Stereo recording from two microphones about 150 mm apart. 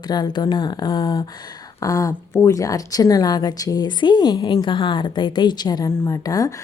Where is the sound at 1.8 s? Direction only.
20° left (ahead or behind).